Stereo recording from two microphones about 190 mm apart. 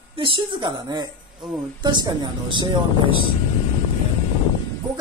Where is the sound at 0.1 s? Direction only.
25° right (ahead or behind).